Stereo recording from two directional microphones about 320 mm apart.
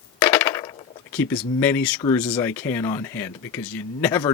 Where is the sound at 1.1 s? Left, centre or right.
Centre.